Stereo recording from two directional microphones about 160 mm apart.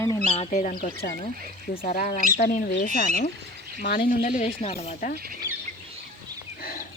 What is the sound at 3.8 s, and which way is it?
Speech, 90° left.